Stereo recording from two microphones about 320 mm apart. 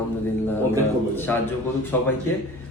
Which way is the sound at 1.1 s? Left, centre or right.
Centre.